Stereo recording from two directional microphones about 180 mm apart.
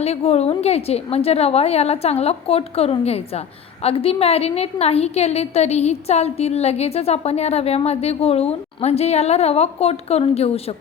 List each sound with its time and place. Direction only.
0.0 s a woman's voice: 35° left (ahead or behind)